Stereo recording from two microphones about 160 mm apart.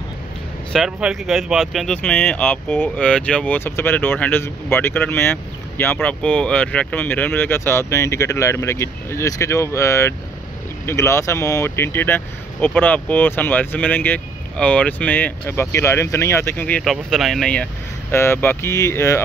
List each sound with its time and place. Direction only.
0.7 s speech: centre (ahead or behind)
18.1 s speech: 15° left (ahead or behind)